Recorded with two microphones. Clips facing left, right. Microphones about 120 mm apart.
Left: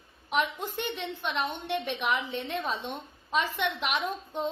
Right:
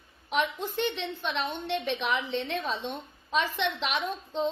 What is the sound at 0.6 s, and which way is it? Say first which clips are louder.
A woman's voice: right 3 dB; 10° left (ahead or behind).